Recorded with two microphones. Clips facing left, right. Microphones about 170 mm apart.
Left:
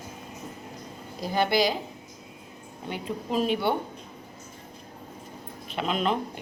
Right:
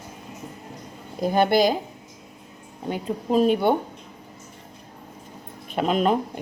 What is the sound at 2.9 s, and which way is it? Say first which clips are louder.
Speech: right 6 dB; 40° right (ahead or behind).